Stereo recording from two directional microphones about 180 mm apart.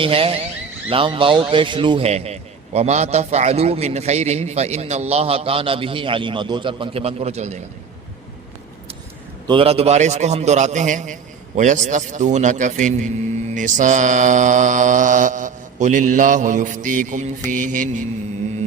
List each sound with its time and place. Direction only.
0.0 s a man's voice: 30° right (ahead or behind)
9.5 s a man's voice: 30° right (ahead or behind)
13.5 s mantra: 45° right (ahead or behind)